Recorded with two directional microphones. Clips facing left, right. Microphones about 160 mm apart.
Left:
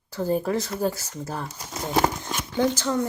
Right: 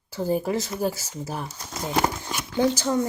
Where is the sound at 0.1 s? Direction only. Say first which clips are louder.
Even; 5° right (ahead or behind).